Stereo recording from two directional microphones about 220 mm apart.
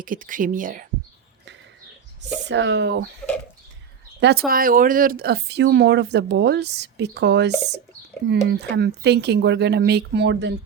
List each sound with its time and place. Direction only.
0.0 s speech: 40° right (ahead or behind)
2.4 s speech: 55° right (ahead or behind)
4.2 s speech: 45° right (ahead or behind)